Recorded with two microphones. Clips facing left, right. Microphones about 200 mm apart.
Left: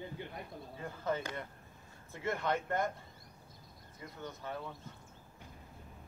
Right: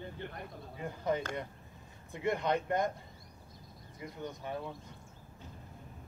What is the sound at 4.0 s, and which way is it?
Speech, 20° right (ahead or behind).